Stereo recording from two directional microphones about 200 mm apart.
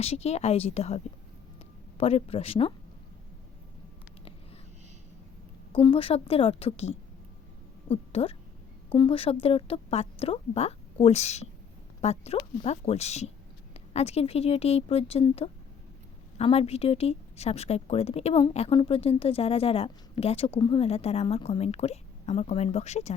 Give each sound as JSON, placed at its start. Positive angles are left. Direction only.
{"t": 0.0, "sound": "a woman's voice", "side_deg": 30}
{"t": 5.7, "sound": "a woman's voice", "side_deg": 25}